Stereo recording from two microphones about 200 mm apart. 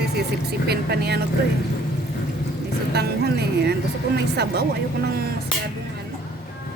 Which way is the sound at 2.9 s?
55° right (ahead or behind).